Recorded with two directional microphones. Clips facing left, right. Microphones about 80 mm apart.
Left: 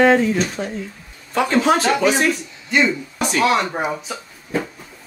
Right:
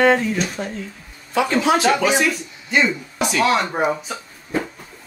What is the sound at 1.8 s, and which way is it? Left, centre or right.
Speech, centre.